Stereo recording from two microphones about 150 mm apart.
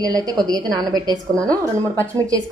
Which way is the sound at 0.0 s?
25° right (ahead or behind).